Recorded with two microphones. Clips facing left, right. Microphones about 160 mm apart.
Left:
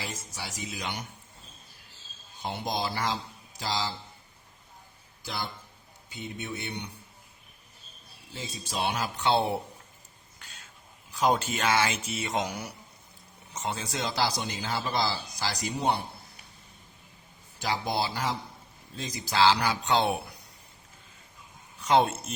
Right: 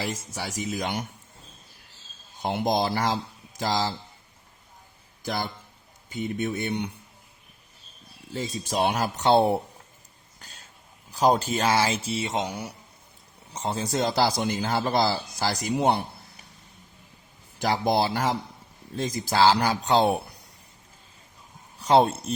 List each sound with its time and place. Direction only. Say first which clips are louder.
0.0 s a man's voice: right 7 dB; 50° right (ahead or behind)
2.4 s a man's voice: right 7 dB; 50° right (ahead or behind)
5.2 s a man's voice: right 6 dB; 50° right (ahead or behind)
8.3 s a man's voice: right 8 dB; 45° right (ahead or behind)
10.4 s a sound: right 2 dB; 35° right (ahead or behind)
11.1 s a man's voice: right 4 dB; 35° right (ahead or behind); by 16.0 s 60° right (ahead or behind)
17.6 s a man's voice: right 6 dB; 50° right (ahead or behind)
21.8 s speech: right 4 dB; 35° right (ahead or behind)